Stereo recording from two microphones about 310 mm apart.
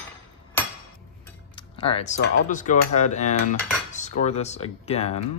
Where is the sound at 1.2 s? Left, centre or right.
Centre.